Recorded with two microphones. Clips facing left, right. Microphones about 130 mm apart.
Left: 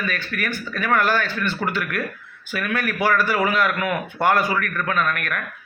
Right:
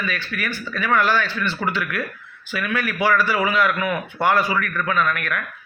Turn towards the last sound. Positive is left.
turn(degrees=45)  # may be behind; listen again after turning